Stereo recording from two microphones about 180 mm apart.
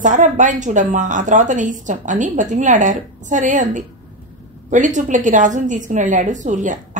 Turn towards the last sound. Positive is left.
turn(degrees=-45)  # may be behind; listen again after turning